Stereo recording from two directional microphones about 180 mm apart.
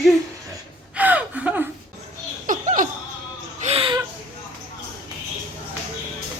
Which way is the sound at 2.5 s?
45° right (ahead or behind).